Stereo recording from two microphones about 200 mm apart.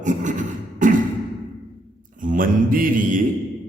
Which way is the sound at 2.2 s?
45° right (ahead or behind).